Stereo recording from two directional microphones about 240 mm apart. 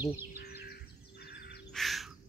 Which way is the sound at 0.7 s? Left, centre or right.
Left.